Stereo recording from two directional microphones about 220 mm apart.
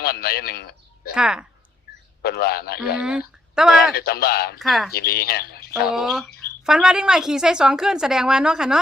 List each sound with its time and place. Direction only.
0.0 s a man's voice: 45° left (ahead or behind)
1.1 s a woman's voice: 5° right (ahead or behind)
2.2 s speech: 45° left (ahead or behind)
3.0 s speech: 5° right (ahead or behind)
3.9 s speech: 45° left (ahead or behind)
4.6 s a woman's voice: centre (ahead or behind)
4.9 s speech: 45° left (ahead or behind)
5.9 s a woman's voice: centre (ahead or behind)